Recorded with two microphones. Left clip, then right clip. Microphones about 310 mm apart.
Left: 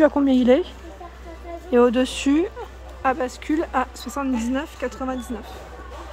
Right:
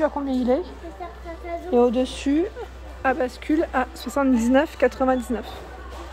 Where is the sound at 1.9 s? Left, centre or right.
Centre.